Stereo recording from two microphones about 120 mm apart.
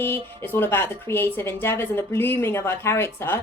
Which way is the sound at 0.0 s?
20° left (ahead or behind).